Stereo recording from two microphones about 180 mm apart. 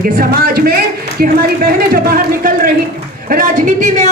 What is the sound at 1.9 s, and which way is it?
A man's voice, 50° right (ahead or behind).